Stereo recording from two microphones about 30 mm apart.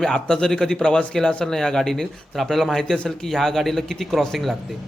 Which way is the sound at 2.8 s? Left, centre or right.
Left.